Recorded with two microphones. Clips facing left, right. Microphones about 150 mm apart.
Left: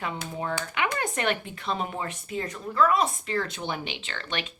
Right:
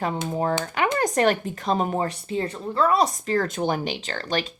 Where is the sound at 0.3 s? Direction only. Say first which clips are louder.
Right 7 dB; 40° right (ahead or behind).